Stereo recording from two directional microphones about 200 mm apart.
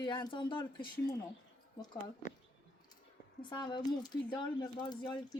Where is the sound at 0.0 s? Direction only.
25° left (ahead or behind).